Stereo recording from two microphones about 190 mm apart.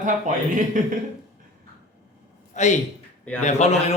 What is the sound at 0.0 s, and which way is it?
Speech, 45° right (ahead or behind).